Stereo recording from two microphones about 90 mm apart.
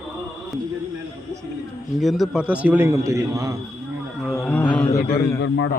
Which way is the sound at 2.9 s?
35° right (ahead or behind).